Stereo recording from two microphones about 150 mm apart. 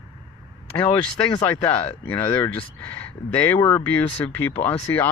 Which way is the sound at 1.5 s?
15° left (ahead or behind).